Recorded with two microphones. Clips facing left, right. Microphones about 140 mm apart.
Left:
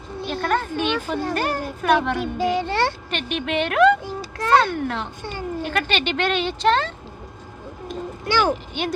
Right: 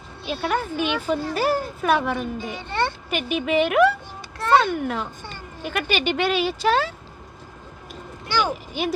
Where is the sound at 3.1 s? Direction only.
5° right (ahead or behind).